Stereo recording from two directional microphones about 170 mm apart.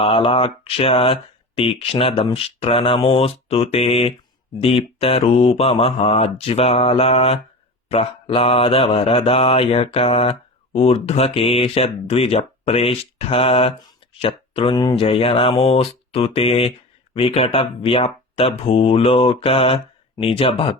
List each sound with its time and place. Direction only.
0.0 s mantra: 30° left (ahead or behind)